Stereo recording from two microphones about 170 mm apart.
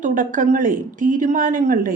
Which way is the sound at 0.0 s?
50° right (ahead or behind).